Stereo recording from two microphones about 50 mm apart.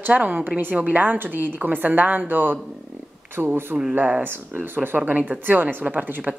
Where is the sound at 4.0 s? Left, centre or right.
Right.